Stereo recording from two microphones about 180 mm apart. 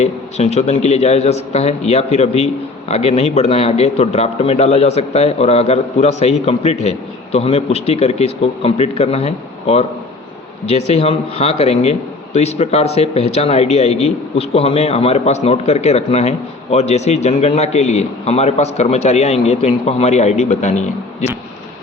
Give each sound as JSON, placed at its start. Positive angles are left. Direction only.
{"t": 0.0, "sound": "a man's voice", "side_deg": 35}